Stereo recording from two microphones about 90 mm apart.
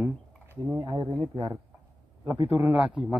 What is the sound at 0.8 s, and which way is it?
Speech, 65° right (ahead or behind).